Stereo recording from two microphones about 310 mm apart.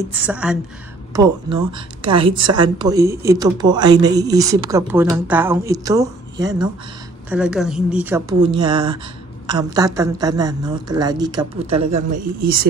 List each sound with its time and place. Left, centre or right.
0.1 s a woman's voice: centre; by 12.6 s right